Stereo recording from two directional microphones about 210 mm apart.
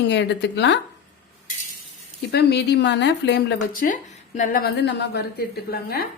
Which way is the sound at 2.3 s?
50° left (ahead or behind).